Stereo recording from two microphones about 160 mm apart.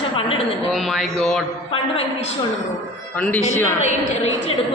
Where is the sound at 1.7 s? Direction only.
40° left (ahead or behind).